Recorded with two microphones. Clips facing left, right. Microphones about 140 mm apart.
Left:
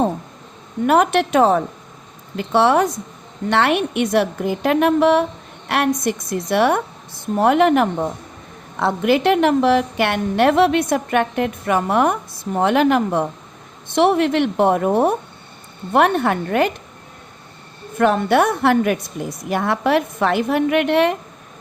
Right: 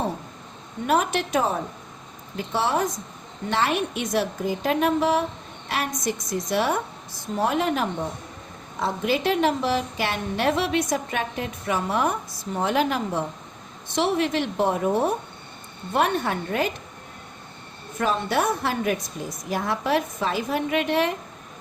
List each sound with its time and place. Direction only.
0.9 s a woman's voice: 65° left (ahead or behind)
17.9 s a woman's voice: 65° left (ahead or behind)